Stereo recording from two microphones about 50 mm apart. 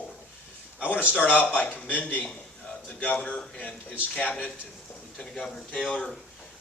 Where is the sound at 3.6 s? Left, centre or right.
Left.